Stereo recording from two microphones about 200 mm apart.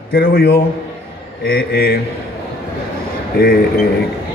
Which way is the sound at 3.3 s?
50° left (ahead or behind).